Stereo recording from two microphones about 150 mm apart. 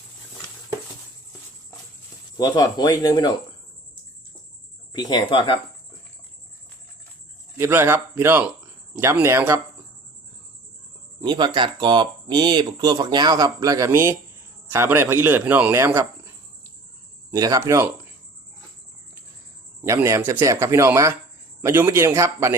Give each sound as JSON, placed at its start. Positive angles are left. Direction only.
{"t": 2.4, "sound": "speech", "side_deg": 25}
{"t": 4.9, "sound": "speech", "side_deg": 25}
{"t": 7.6, "sound": "speech", "side_deg": -15}
{"t": 11.2, "sound": "speech", "side_deg": -30}
{"t": 17.3, "sound": "speech", "side_deg": -25}
{"t": 19.8, "sound": "speech", "side_deg": -20}